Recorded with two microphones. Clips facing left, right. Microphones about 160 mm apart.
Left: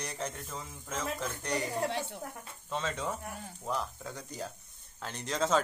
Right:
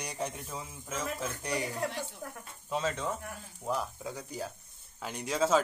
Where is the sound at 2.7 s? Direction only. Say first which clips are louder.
Right 2 dB; 5° right (ahead or behind).